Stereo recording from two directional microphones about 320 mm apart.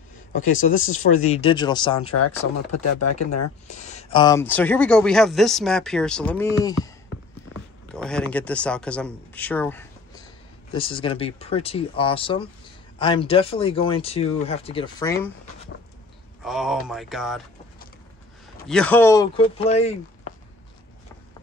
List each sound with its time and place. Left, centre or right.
0.5 s speech: left
0.8 s speech: left
1.1 s speech: left
2.0 s speech: left
3.8 s speech: centre
7.9 s a man's voice: centre
16.4 s speech: centre
18.7 s speech: centre